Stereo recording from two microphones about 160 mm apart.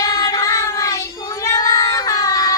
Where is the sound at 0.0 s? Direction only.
25° left (ahead or behind).